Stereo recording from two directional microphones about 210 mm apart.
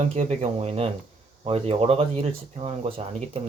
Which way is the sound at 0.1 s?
30° right (ahead or behind).